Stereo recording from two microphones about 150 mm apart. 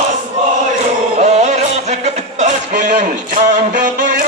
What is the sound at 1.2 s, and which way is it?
Music, 50° right (ahead or behind).